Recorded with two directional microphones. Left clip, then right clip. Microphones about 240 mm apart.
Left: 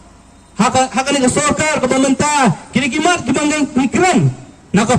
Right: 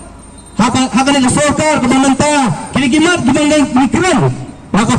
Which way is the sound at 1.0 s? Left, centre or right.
Left.